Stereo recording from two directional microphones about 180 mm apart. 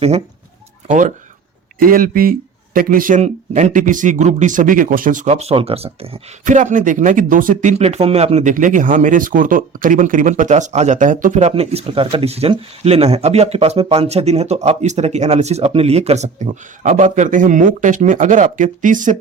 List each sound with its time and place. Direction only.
0.9 s speech: 45° right (ahead or behind)
6.4 s speech: 45° right (ahead or behind)